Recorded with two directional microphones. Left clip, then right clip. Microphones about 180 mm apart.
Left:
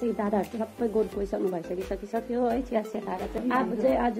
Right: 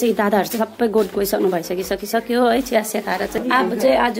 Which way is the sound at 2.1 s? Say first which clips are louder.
Right 11 dB; 25° right (ahead or behind).